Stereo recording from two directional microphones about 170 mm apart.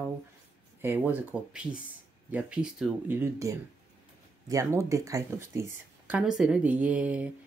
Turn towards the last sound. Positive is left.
turn(degrees=-5)  # may be behind; listen again after turning